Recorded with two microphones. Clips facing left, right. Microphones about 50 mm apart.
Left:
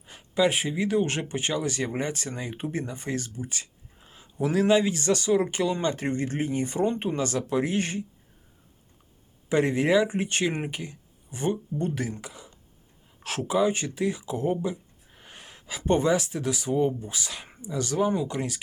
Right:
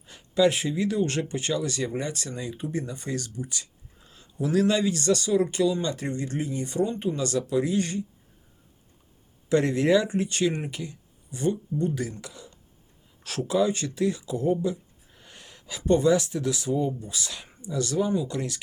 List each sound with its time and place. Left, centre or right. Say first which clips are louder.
0.1 s speech: right 2 dB; left
6.8 s speech: left 2 dB; left
9.5 s speech: right 1 dB; left
17.9 s speech: left 1 dB; left
18.3 s speech: even; left